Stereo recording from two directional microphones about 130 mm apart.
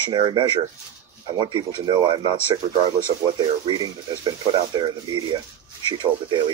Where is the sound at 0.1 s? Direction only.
35° right (ahead or behind).